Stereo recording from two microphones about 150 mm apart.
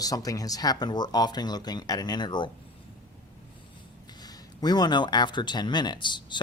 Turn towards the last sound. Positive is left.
turn(degrees=30)  # may be behind; listen again after turning